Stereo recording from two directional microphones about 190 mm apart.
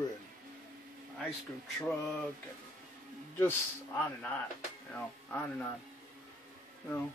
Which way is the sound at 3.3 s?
10° left (ahead or behind).